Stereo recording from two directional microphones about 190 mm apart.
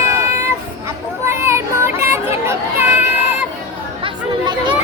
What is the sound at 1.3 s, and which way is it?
Children playing, 15° right (ahead or behind).